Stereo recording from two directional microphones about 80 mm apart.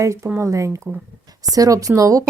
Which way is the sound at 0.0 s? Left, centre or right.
Right.